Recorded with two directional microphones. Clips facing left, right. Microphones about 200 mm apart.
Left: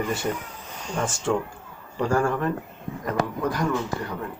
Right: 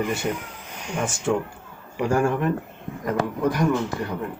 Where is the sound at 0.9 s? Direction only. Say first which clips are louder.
Right 1 dB; 15° right (ahead or behind).